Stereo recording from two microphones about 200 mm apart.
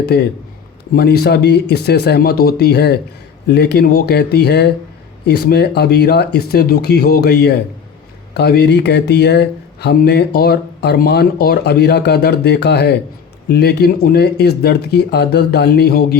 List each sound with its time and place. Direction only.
0.0 s speech: 55° left (ahead or behind)